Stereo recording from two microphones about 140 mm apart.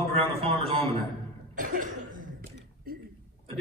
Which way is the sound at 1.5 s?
75° right (ahead or behind).